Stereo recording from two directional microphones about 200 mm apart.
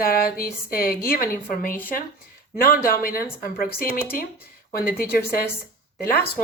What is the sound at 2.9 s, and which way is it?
A woman's voice, 45° left (ahead or behind).